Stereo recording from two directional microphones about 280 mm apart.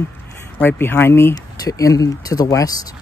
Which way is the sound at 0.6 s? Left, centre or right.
Centre.